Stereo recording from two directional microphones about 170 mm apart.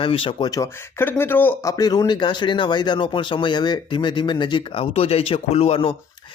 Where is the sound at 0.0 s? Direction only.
30° left (ahead or behind).